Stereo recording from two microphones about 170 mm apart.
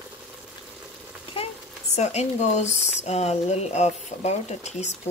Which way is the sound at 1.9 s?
40° left (ahead or behind).